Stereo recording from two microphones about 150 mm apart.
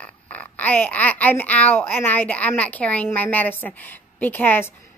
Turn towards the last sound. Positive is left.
turn(degrees=15)  # may be behind; listen again after turning